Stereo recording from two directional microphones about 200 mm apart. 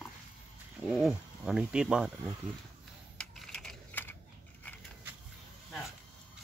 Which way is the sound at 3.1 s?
Centre (ahead or behind).